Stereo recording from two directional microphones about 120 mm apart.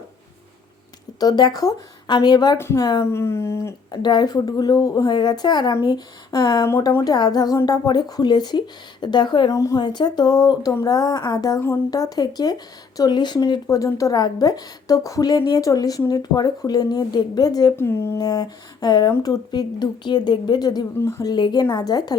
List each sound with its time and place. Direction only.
1.2 s speech: 35° left (ahead or behind)
2.6 s speech: 25° left (ahead or behind)
3.9 s speech: 35° left (ahead or behind)
17.7 s speech: 20° left (ahead or behind)
18.2 s speech: 35° left (ahead or behind)